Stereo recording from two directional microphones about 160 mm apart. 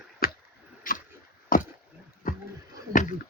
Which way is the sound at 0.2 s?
70° left (ahead or behind).